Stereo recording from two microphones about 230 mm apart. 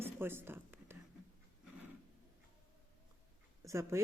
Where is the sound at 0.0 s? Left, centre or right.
Centre.